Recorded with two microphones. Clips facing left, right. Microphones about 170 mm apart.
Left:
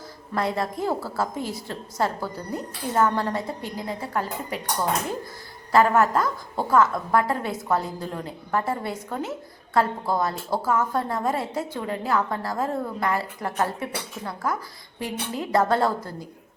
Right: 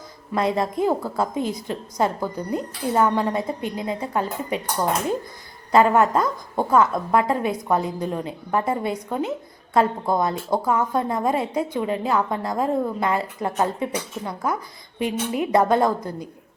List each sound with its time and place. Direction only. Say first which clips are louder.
0.3 s a woman's voice: right 4 dB; 20° right (ahead or behind)
5.7 s a woman's voice: right 2 dB; 20° right (ahead or behind)